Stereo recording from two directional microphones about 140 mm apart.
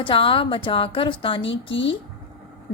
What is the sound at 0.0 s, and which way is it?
A woman's voice, 40° left (ahead or behind).